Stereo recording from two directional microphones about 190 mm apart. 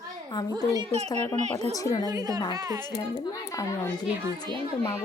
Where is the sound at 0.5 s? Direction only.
20° right (ahead or behind).